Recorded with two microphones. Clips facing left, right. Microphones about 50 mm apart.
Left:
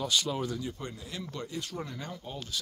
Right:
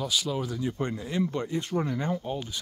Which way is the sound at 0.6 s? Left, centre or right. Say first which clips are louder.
Right 8 dB; right.